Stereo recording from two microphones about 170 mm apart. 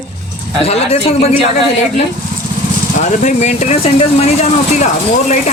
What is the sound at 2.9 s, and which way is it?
Speech, 45° left (ahead or behind).